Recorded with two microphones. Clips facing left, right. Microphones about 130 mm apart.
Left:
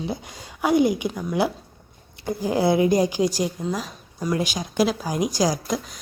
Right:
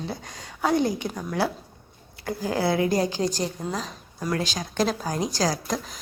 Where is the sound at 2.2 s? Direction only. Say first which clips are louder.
Left 4 dB; 20° left (ahead or behind).